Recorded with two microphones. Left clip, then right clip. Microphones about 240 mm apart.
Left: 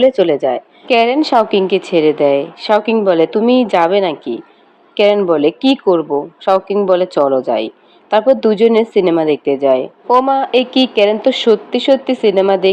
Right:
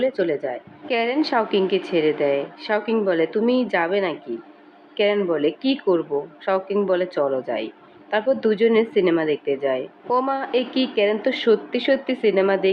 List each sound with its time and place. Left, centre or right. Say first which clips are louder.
0.0 s a woman's voice: left 11 dB; left